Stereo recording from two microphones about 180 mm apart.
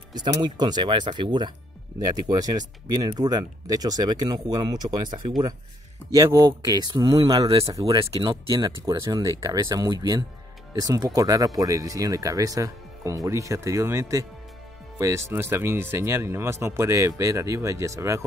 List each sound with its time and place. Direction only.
0.1 s speech: 25° right (ahead or behind)